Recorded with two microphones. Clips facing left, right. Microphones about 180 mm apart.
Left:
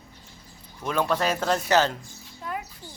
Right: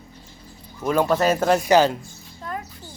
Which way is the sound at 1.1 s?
5° right (ahead or behind).